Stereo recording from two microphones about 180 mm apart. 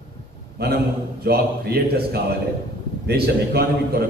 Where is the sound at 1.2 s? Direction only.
60° right (ahead or behind).